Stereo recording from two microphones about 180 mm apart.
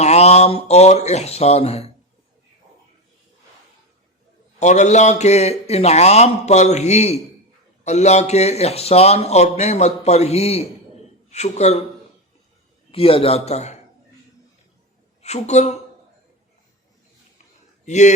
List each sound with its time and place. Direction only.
0.0 s a man's voice: 35° left (ahead or behind)
4.6 s a man's voice: 40° left (ahead or behind)
12.9 s a man's voice: 30° left (ahead or behind)
15.2 s speech: 40° left (ahead or behind)
17.8 s speech: 40° left (ahead or behind)